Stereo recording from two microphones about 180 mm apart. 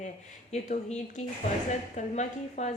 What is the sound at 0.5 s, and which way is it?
A woman's voice, 40° left (ahead or behind).